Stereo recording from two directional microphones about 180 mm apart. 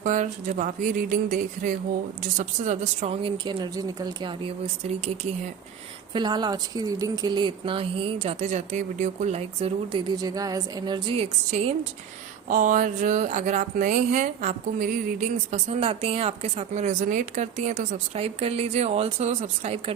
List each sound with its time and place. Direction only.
0.0 s speech: 40° right (ahead or behind)
2.4 s speech: 40° right (ahead or behind)
6.1 s speech: 25° right (ahead or behind)
10.2 s speech: 20° right (ahead or behind)
12.5 s speech: 45° right (ahead or behind)